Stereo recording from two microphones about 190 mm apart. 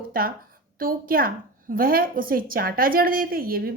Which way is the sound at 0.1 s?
50° right (ahead or behind).